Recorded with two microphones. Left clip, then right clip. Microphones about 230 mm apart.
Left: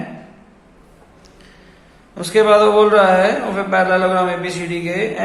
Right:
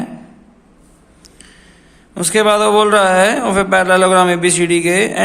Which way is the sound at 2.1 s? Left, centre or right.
Right.